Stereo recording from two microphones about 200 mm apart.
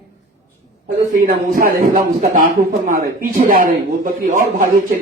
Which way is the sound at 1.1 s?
40° right (ahead or behind).